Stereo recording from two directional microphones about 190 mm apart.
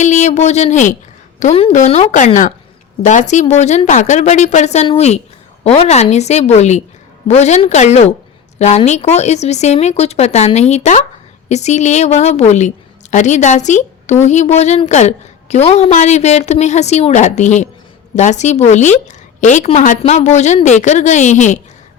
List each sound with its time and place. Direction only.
0.0 s a woman's voice: 40° left (ahead or behind)